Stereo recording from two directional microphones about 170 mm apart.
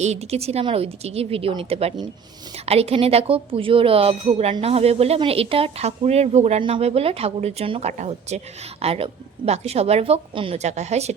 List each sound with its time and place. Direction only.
0.0 s speech: 40° right (ahead or behind)